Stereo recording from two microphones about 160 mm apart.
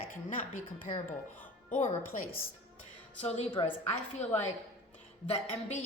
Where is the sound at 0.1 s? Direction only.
55° left (ahead or behind).